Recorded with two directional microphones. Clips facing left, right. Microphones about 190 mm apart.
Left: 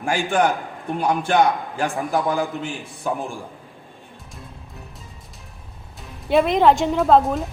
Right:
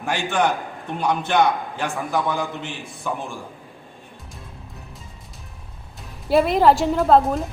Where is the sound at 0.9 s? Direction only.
10° left (ahead or behind).